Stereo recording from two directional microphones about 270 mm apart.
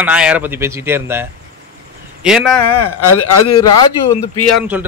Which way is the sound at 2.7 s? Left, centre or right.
Centre.